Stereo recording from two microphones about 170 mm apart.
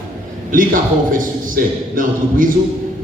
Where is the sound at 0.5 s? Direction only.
50° right (ahead or behind).